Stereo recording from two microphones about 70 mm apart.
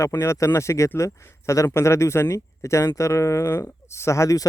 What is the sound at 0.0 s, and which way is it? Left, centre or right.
Speech, left.